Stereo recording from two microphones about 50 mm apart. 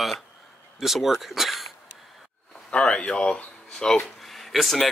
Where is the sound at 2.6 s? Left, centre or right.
Left.